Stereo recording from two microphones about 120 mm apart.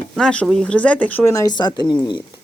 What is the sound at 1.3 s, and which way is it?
Speech, 30° left (ahead or behind).